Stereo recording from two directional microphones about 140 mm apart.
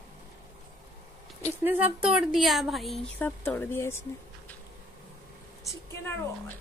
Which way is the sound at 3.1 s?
15° left (ahead or behind).